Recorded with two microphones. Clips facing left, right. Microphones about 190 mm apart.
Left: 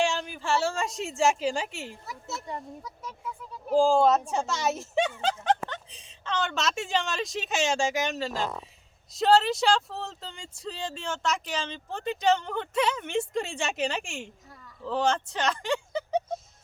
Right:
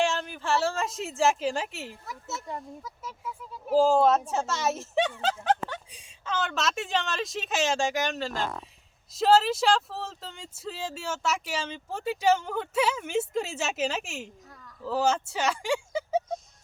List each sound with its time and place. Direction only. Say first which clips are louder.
0.0 s a woman's voice: even; centre (ahead or behind)